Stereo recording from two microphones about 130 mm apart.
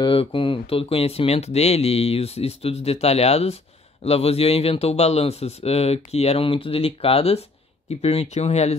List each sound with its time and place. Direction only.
0.0 s speech: 40° left (ahead or behind)